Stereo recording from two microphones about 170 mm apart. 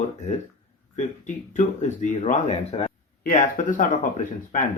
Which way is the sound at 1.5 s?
45° left (ahead or behind).